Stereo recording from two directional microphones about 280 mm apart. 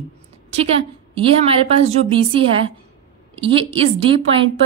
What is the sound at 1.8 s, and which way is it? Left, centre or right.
A woman's voice, centre.